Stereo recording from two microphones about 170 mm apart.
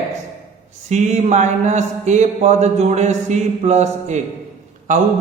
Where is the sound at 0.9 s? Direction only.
45° right (ahead or behind).